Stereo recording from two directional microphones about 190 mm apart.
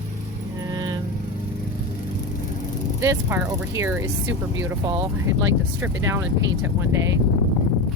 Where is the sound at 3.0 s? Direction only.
15° right (ahead or behind).